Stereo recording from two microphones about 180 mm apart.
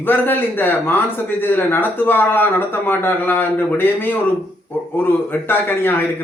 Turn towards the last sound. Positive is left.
turn(degrees=10)  # may be behind; listen again after turning